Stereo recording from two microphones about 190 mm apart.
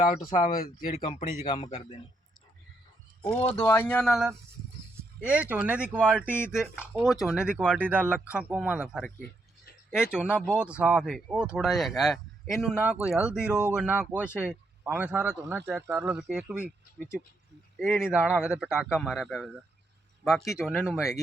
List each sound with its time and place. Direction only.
0.0 s speech: 45° left (ahead or behind)
1.1 s speech: 25° left (ahead or behind)
3.2 s speech: 15° left (ahead or behind); by 6.0 s 10° right (ahead or behind)
6.2 s speech: 10° left (ahead or behind)
6.9 s speech: centre (ahead or behind)
10.3 s speech: 10° left (ahead or behind)
10.6 s speech: 5° right (ahead or behind)
17.0 s speech: 5° left (ahead or behind)
20.6 s speech: centre (ahead or behind)